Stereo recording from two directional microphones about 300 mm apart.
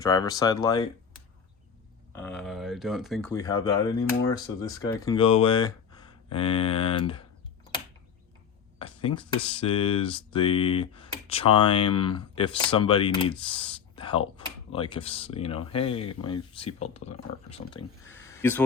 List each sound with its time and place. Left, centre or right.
0.0 s speech: centre
2.1 s speech: centre
8.8 s speech: centre
13.4 s a sound: centre
14.7 s speech: centre
18.0 s a sound: centre